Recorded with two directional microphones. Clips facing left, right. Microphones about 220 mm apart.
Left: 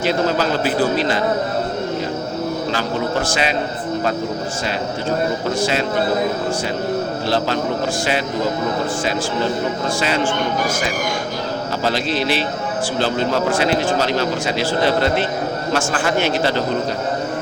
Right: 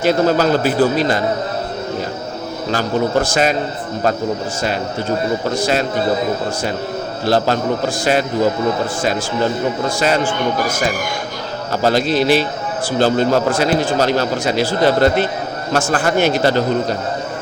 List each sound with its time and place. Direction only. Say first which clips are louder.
0.0 s a man's voice: right 4 dB; 45° right (ahead or behind)
2.7 s a man's voice: right 9 dB; 45° right (ahead or behind)
7.3 s a man's voice: right 6 dB; 45° right (ahead or behind)
11.8 s a man's voice: right 7 dB; 45° right (ahead or behind)